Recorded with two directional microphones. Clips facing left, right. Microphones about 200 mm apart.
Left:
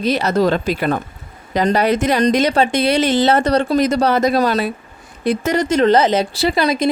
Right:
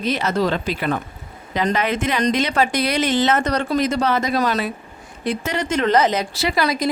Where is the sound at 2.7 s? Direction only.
30° left (ahead or behind).